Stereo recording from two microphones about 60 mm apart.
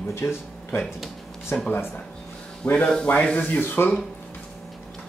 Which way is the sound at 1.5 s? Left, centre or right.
Left.